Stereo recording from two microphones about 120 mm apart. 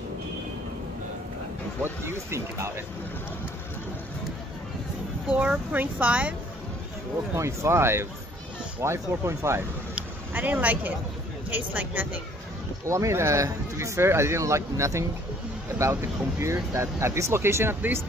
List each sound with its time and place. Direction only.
1.8 s speech: 20° right (ahead or behind)
5.3 s speech: 10° right (ahead or behind)
7.3 s speech: 25° right (ahead or behind)